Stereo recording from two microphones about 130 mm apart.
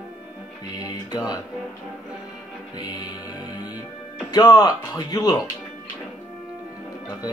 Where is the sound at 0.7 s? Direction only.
30° left (ahead or behind).